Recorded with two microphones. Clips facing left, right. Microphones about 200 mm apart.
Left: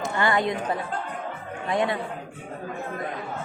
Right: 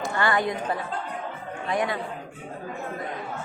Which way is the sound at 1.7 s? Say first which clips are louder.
Left 2 dB; 25° left (ahead or behind).